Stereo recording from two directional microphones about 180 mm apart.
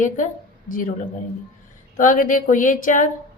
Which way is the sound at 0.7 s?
50° left (ahead or behind).